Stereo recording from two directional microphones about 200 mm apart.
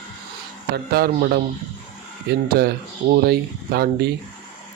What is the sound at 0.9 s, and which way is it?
Speech, 50° right (ahead or behind).